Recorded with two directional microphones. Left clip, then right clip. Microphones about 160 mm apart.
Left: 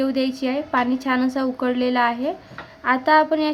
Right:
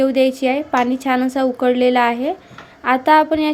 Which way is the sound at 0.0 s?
20° right (ahead or behind).